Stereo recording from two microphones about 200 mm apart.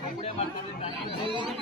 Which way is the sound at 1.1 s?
25° right (ahead or behind).